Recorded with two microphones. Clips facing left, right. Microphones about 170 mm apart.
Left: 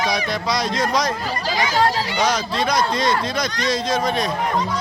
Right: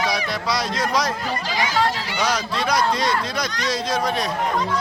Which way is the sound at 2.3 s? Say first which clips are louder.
Right 2 dB; 10° right (ahead or behind).